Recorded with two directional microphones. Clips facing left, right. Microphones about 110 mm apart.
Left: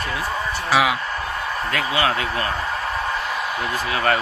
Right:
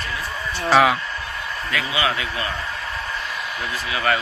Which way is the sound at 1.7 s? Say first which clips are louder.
Left 1 dB; 45° left (ahead or behind).